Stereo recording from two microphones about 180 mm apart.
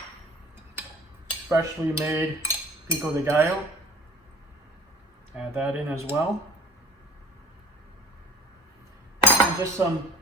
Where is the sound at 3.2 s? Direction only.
15° right (ahead or behind).